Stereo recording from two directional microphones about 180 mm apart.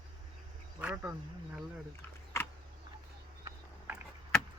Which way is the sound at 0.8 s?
5° right (ahead or behind).